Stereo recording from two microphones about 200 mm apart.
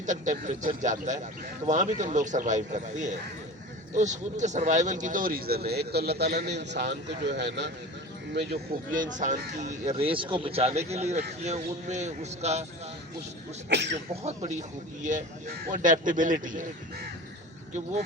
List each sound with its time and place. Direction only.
0.0 s speech: 40° right (ahead or behind)
13.7 s speech: 60° right (ahead or behind)
15.0 s speech: 45° right (ahead or behind)